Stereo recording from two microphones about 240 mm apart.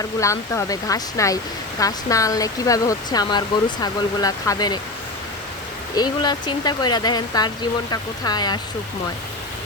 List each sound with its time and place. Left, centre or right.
0.2 s speech: centre
6.0 s speech: centre